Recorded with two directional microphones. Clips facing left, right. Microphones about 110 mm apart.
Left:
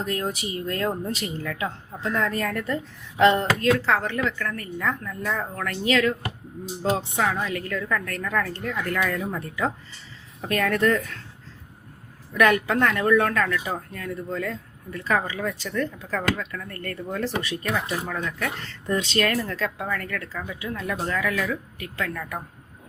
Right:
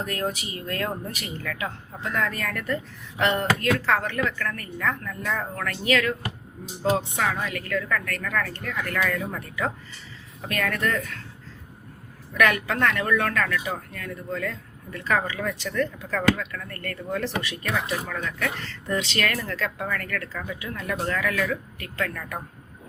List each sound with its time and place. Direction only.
0.0 s speech: 20° left (ahead or behind)
12.4 s speech: 25° left (ahead or behind)